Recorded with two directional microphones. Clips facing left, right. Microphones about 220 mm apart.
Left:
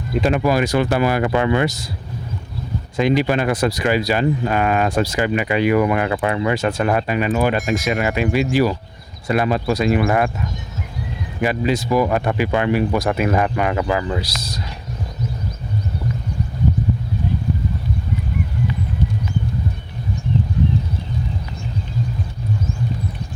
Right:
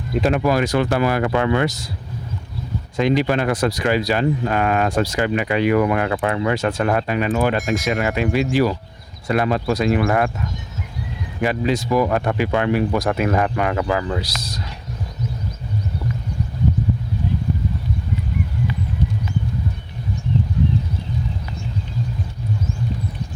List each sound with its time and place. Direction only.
0.1 s speech: centre (ahead or behind)
3.0 s speech: 10° left (ahead or behind)
11.3 s speech: 5° left (ahead or behind)